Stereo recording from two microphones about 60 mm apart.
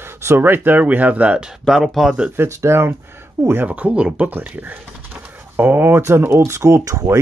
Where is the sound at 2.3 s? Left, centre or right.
Right.